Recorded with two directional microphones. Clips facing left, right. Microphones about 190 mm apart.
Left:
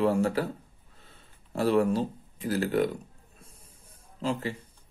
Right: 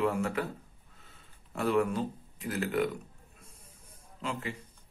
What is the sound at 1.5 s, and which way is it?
Speech, 35° left (ahead or behind).